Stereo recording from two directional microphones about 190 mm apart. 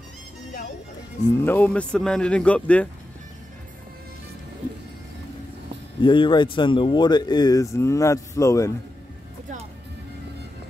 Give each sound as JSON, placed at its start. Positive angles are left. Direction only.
{"t": 1.3, "sound": "speech", "side_deg": 10}
{"t": 6.0, "sound": "speech", "side_deg": 25}